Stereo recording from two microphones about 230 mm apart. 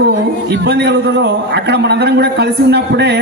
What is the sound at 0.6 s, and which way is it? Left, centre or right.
A man's voice, right.